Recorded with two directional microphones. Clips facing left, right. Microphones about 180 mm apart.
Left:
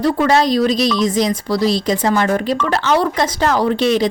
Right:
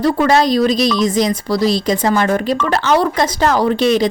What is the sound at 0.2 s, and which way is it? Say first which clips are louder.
A woman's voice: right 1 dB; 45° right (ahead or behind).